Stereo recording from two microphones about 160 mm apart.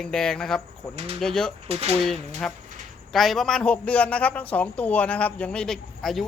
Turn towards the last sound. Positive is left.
turn(degrees=0)  # may be behind; listen again after turning